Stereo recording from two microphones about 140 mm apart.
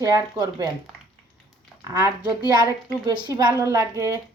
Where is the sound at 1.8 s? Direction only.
25° right (ahead or behind).